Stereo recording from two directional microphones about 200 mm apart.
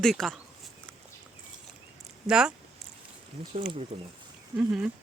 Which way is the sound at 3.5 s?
25° right (ahead or behind).